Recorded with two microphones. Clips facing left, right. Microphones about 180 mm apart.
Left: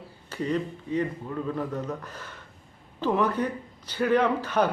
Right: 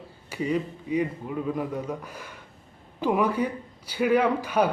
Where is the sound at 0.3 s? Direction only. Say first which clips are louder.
Right 1 dB; 10° right (ahead or behind).